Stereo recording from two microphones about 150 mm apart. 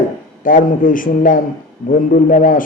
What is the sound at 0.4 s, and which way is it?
A man's voice, 65° left (ahead or behind).